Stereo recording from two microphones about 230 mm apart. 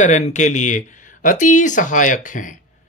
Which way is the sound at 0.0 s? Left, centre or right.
Left.